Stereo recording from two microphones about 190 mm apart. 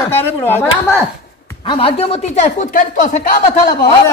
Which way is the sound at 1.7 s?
30° left (ahead or behind).